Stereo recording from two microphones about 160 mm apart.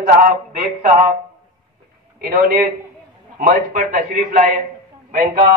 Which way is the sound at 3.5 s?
55° right (ahead or behind).